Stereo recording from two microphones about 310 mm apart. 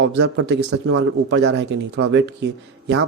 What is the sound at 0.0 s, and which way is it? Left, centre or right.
Speech, right.